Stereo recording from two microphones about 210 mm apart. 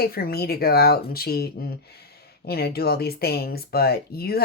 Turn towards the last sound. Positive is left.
turn(degrees=45)  # may be behind; listen again after turning